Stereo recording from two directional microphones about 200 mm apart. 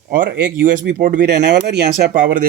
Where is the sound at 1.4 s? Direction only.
55° right (ahead or behind).